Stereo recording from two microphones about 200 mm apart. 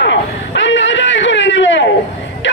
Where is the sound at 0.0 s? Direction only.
65° left (ahead or behind).